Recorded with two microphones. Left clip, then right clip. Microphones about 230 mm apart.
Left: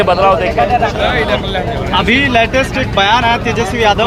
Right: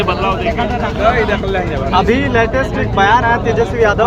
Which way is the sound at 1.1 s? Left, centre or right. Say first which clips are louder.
Even; left.